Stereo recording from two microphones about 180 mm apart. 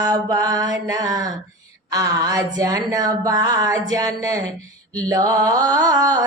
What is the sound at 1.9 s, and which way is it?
Speech, 20° right (ahead or behind).